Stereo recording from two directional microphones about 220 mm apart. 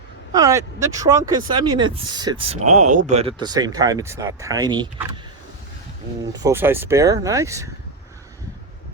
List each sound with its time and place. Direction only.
0.3 s speech: 15° right (ahead or behind)
2.5 s speech: 30° right (ahead or behind)
6.3 s speech: 15° right (ahead or behind)